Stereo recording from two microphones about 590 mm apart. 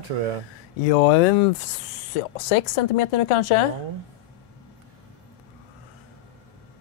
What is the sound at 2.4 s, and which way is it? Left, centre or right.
Speech, left.